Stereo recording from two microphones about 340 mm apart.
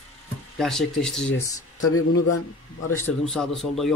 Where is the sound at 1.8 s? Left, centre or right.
Left.